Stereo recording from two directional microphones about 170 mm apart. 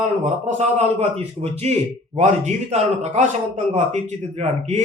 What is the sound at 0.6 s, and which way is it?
A man's voice, 40° right (ahead or behind).